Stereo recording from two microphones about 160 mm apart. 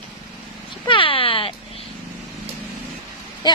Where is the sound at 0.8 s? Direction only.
35° left (ahead or behind).